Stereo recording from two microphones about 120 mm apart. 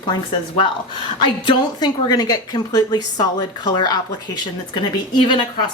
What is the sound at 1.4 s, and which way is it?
A woman's voice, 35° left (ahead or behind).